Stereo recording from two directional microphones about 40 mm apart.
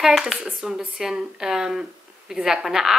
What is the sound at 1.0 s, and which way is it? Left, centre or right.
A woman's voice, centre.